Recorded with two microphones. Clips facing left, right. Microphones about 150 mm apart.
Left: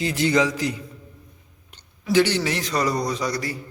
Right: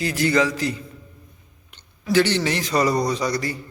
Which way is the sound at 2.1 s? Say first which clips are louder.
Even; 15° left (ahead or behind).